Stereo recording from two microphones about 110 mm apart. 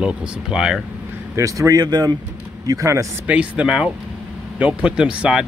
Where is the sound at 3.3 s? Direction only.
10° right (ahead or behind).